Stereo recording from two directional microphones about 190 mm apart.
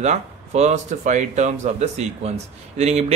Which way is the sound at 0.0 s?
35° right (ahead or behind).